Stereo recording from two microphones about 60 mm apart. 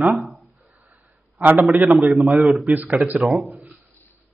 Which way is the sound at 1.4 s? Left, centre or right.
Right.